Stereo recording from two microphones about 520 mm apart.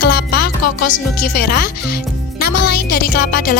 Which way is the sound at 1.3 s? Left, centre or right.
Centre.